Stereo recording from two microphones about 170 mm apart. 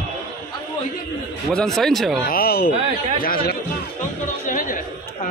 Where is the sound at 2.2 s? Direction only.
60° left (ahead or behind).